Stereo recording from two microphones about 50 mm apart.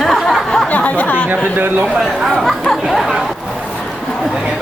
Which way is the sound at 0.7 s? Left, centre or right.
Left.